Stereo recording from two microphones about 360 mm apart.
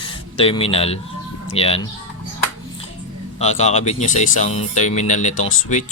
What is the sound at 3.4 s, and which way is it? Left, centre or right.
Speech, centre.